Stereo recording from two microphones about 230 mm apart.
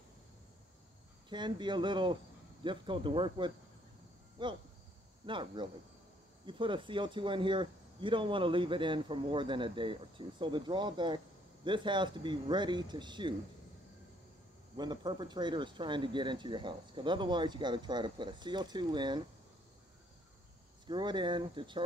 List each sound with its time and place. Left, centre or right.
1.3 s speech: centre
14.8 s speech: centre
20.8 s speech: centre